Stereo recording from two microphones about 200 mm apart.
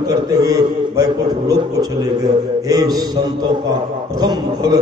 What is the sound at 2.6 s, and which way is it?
Speech, 20° right (ahead or behind).